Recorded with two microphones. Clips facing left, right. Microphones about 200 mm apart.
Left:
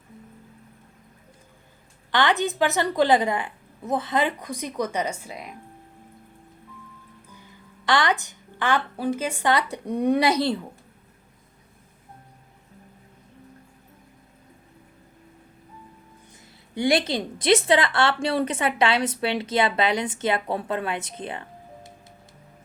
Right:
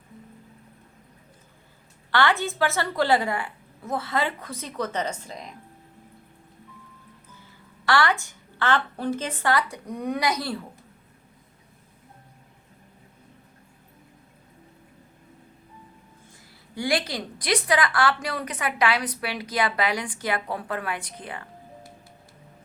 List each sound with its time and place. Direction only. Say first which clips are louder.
2.1 s a woman's voice: left 1 dB; 20° left (ahead or behind)
7.3 s a woman's voice: left 2 dB; 15° left (ahead or behind)
16.7 s a woman's voice: left 5 dB; 20° left (ahead or behind)